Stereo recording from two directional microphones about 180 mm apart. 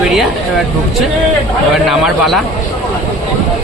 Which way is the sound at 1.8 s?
Centre (ahead or behind).